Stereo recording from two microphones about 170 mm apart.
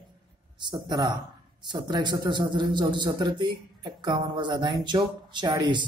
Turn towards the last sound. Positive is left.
turn(degrees=-25)  # may be behind; listen again after turning